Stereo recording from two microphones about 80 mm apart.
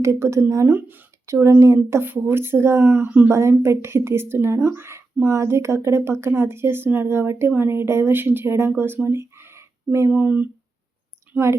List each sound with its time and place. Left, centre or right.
0.0 s speech: right
1.3 s speech: right
9.0 s a sound: right
10.1 s speech: right